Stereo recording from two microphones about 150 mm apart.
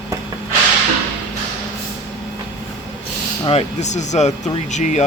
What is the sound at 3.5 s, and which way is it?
Speech, 45° left (ahead or behind).